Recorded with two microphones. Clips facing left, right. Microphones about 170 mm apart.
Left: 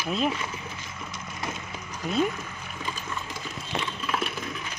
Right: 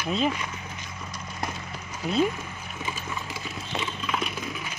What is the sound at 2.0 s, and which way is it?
Speech, centre (ahead or behind).